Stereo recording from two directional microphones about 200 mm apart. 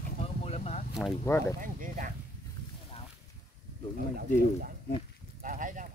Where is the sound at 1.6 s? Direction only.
40° right (ahead or behind).